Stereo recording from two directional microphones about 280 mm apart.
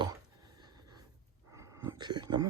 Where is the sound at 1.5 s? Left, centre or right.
Centre.